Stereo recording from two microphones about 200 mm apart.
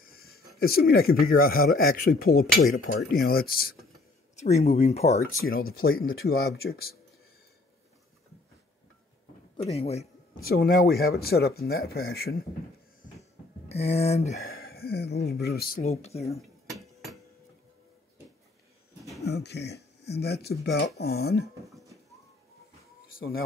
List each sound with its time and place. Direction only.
0.0 s a sound: 50° left (ahead or behind)
0.6 s speech: 50° left (ahead or behind)
4.4 s speech: 35° left (ahead or behind)
5.7 s speech: 50° left (ahead or behind)
9.6 s speech: 30° left (ahead or behind)
10.4 s speech: 50° left (ahead or behind)
13.0 s a sound: 30° left (ahead or behind)
14.5 s speech: 50° left (ahead or behind)
15.8 s speech: 35° left (ahead or behind)
16.3 s cutlery: centre (ahead or behind)
19.2 s speech: 55° left (ahead or behind)
23.1 s speech: 50° left (ahead or behind)